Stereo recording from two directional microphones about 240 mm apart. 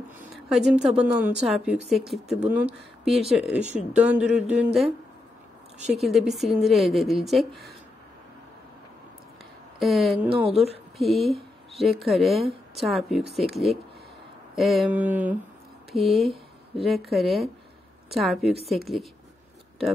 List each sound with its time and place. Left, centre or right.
0.2 s a sound: centre
0.8 s speech: centre
5.9 s speech: centre
9.8 s speech: centre
10.3 s a woman's voice: right
11.0 s speech: centre
14.5 s a sound: centre
15.9 s speech: centre